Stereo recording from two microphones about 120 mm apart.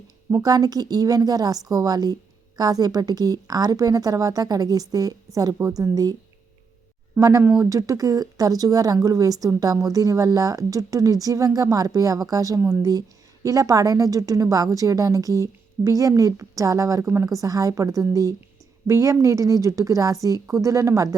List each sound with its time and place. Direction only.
0.4 s a woman's voice: 30° right (ahead or behind)
7.2 s speech: 25° right (ahead or behind)